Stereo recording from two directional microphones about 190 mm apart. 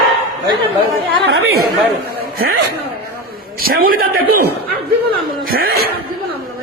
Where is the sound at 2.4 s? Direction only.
55° right (ahead or behind).